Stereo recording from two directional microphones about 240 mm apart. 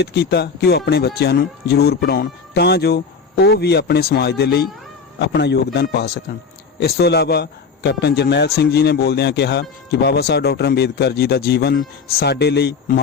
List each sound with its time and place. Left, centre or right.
0.0 s a man's voice: left